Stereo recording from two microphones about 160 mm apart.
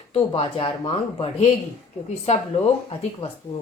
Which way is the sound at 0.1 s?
35° left (ahead or behind).